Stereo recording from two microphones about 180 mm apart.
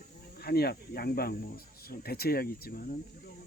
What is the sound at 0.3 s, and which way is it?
Speech, 60° left (ahead or behind).